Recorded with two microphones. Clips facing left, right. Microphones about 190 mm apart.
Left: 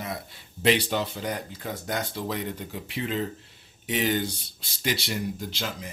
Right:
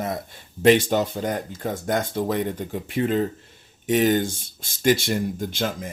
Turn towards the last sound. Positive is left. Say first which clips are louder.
# right 7 dB
turn(degrees=-50)  # may be behind; listen again after turning